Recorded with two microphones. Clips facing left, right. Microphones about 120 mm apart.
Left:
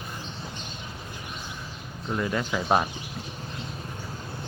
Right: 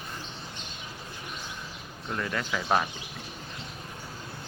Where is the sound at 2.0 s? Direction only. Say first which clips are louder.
Left 4 dB; 15° left (ahead or behind).